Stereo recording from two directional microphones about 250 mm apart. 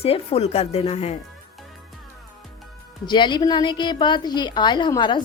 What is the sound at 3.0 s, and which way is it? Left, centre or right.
A woman's voice, centre.